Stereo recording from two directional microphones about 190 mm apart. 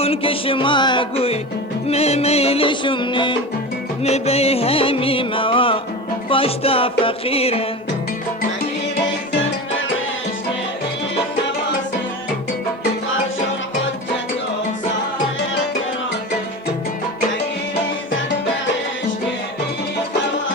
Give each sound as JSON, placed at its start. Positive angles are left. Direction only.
{"t": 0.0, "sound": "music", "side_deg": 30}